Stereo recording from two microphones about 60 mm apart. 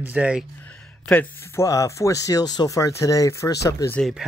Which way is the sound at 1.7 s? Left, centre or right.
Left.